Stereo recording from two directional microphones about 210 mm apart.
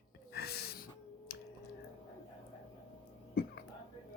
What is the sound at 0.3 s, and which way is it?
Snort, 50° left (ahead or behind).